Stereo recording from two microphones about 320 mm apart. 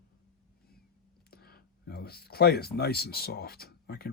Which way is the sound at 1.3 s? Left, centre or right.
Left.